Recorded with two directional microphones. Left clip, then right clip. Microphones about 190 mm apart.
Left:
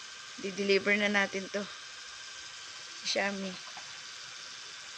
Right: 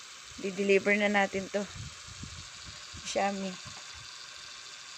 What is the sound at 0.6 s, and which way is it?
Speech, 20° right (ahead or behind).